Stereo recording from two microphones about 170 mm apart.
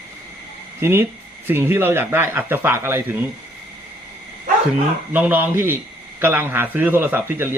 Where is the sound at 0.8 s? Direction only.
15° right (ahead or behind).